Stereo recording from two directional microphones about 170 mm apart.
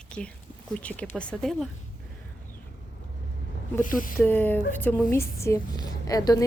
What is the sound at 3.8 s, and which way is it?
Speech, 50° left (ahead or behind).